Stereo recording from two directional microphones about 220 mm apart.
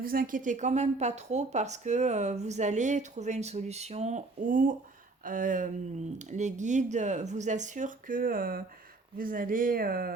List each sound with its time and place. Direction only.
0.0 s a woman's voice: 40° right (ahead or behind)